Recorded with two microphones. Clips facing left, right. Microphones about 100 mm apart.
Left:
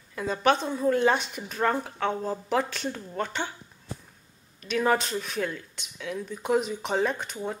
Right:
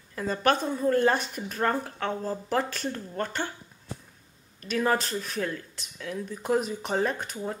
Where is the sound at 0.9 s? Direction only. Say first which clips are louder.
Even; 45° right (ahead or behind).